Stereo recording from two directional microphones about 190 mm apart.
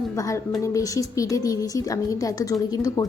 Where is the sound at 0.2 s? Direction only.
15° left (ahead or behind).